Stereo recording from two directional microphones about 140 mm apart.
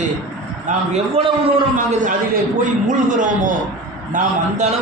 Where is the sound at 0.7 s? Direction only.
60° right (ahead or behind).